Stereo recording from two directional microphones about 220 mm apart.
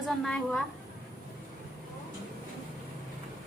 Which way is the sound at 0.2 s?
5° left (ahead or behind).